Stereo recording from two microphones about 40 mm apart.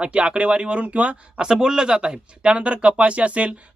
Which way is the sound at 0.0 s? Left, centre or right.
Right.